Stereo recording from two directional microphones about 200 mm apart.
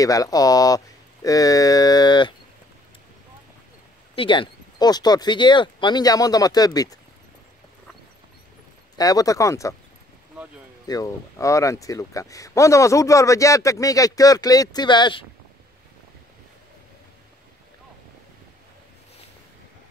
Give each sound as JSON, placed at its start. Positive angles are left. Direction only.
{"t": 0.0, "sound": "speech", "side_deg": 15}
{"t": 4.1, "sound": "speech", "side_deg": 25}
{"t": 8.9, "sound": "speech", "side_deg": 20}
{"t": 10.9, "sound": "speech", "side_deg": 15}